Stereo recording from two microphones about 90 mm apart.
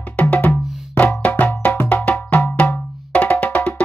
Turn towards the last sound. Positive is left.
turn(degrees=15)  # may be behind; listen again after turning